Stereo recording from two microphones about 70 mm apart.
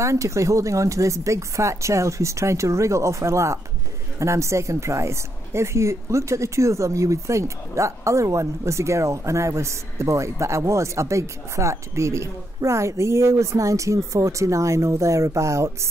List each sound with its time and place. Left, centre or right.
0.0 s a woman's voice: right